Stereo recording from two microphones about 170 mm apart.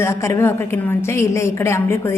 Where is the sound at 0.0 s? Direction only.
15° left (ahead or behind).